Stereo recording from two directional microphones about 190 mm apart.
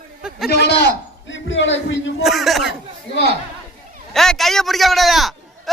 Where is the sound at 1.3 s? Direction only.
75° left (ahead or behind).